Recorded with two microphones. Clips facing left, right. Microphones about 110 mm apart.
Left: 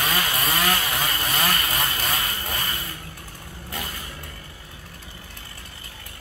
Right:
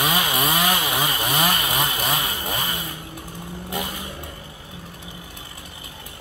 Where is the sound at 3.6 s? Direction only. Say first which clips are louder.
Right 5 dB; 15° right (ahead or behind).